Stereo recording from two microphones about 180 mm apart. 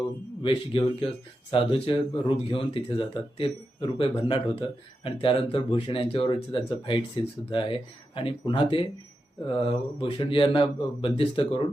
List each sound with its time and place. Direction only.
0.4 s speech: 30° left (ahead or behind)